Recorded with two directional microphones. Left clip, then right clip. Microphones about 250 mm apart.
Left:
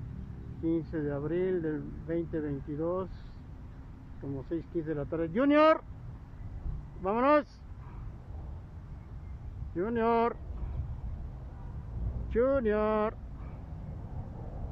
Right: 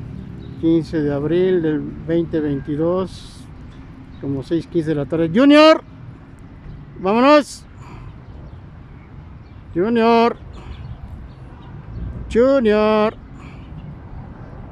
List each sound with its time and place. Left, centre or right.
0.7 s speech: centre
4.5 s speech: centre
7.0 s speech: centre
9.8 s speech: centre
12.3 s speech: centre